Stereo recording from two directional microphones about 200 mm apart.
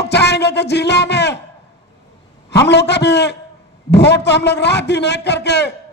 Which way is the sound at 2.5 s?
60° left (ahead or behind).